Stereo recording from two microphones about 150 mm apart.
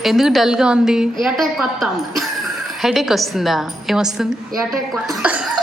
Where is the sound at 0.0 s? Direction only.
Centre (ahead or behind).